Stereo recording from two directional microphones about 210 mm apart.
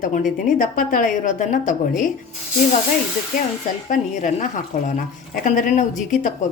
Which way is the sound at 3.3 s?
35° left (ahead or behind).